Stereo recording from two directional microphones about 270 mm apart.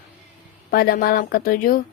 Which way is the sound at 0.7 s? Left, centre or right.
Left.